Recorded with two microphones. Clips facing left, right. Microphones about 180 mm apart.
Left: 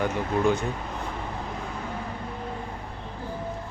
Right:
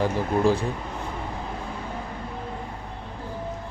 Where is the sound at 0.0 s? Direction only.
30° right (ahead or behind).